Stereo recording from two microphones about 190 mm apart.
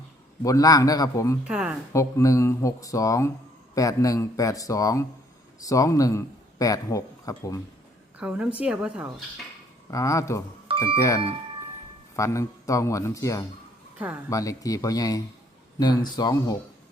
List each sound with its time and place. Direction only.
0.4 s a man's voice: 20° left (ahead or behind)
1.5 s a woman's voice: 5° right (ahead or behind)
1.9 s speech: 15° left (ahead or behind)
8.2 s a woman's voice: 5° right (ahead or behind)
9.9 s a man's voice: 15° left (ahead or behind)